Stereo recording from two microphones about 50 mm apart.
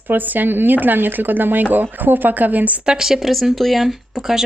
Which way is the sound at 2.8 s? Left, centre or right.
Centre.